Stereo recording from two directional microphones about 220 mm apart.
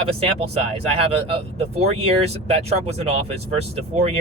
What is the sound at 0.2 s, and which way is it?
Speech, 25° right (ahead or behind).